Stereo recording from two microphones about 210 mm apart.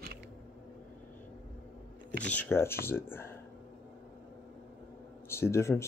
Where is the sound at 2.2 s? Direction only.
5° left (ahead or behind).